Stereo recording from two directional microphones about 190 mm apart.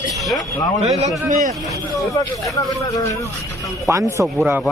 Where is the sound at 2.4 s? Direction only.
20° left (ahead or behind).